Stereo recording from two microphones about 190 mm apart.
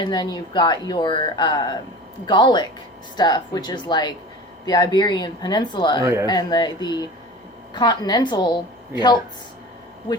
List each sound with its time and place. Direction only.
0.0 s speech: 20° left (ahead or behind)
6.0 s speech: 15° right (ahead or behind)
6.2 s speech: 20° left (ahead or behind)